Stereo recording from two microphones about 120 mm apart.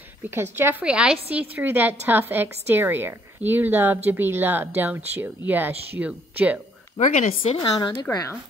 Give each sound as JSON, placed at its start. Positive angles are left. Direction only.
{"t": 0.3, "sound": "a woman's voice", "side_deg": -20}
{"t": 0.8, "sound": "a woman's voice", "side_deg": -5}
{"t": 7.0, "sound": "speech", "side_deg": 75}
{"t": 7.7, "sound": "speech", "side_deg": 35}